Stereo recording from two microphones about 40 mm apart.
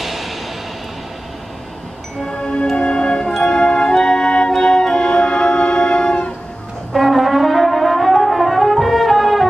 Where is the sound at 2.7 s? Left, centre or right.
Left.